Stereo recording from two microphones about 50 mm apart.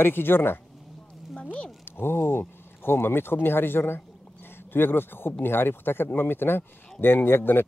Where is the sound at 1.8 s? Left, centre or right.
Left.